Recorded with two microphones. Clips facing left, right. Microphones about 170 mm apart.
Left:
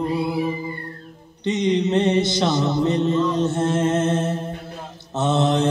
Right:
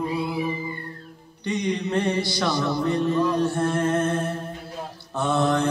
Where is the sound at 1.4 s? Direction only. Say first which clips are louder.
Left 6 dB; 20° left (ahead or behind).